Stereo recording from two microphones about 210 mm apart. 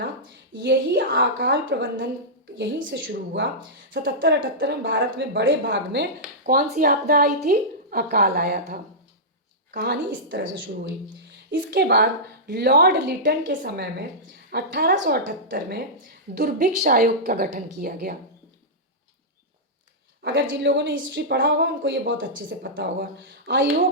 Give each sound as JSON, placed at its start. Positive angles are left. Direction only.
{"t": 0.6, "sound": "a woman's voice", "side_deg": -55}
{"t": 11.5, "sound": "a woman's voice", "side_deg": -50}
{"t": 20.2, "sound": "a woman's voice", "side_deg": -55}